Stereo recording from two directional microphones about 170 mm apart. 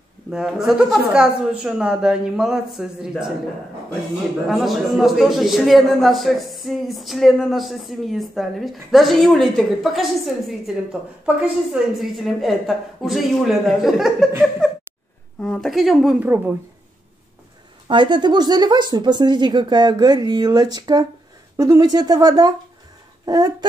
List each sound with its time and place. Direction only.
0.3 s a man's voice: centre (ahead or behind)
4.5 s a man's voice: centre (ahead or behind)
14.6 s a sound: 5° left (ahead or behind)
15.4 s a man's voice: 5° left (ahead or behind)
17.8 s a woman's voice: 30° right (ahead or behind)
23.2 s a sound: 20° right (ahead or behind)